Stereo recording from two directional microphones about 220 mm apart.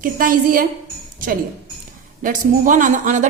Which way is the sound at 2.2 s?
35° right (ahead or behind).